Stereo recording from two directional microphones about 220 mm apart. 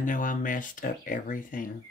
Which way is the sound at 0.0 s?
35° left (ahead or behind).